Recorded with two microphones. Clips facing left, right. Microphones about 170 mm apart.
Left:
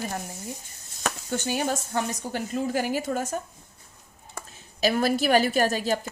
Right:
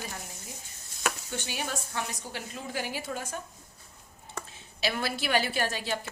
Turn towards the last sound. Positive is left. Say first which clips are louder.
# left 8 dB
turn(degrees=40)  # may be behind; listen again after turning